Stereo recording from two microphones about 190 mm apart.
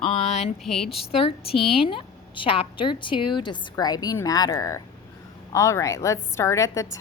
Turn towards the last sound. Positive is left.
turn(degrees=15)  # may be behind; listen again after turning